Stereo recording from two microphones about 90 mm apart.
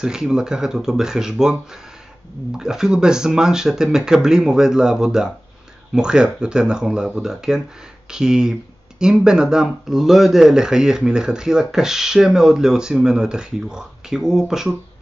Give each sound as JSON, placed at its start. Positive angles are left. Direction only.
{"t": 0.0, "sound": "speech", "side_deg": -5}